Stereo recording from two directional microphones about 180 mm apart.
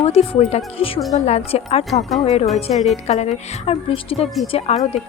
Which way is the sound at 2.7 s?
Centre (ahead or behind).